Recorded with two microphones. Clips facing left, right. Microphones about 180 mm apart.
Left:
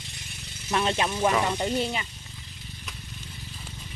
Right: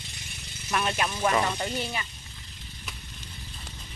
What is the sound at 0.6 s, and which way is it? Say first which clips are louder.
Speech: left 3 dB; 25° left (ahead or behind).